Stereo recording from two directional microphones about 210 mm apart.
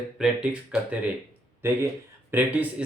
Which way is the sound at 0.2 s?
5° right (ahead or behind).